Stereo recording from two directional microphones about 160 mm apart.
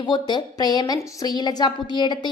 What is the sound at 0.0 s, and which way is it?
A woman's voice, 30° left (ahead or behind).